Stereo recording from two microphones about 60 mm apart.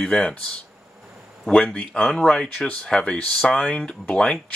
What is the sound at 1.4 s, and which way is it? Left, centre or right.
A man's voice, centre.